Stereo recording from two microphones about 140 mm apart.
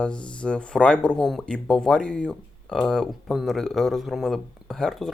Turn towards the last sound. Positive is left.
turn(degrees=0)  # may be behind; listen again after turning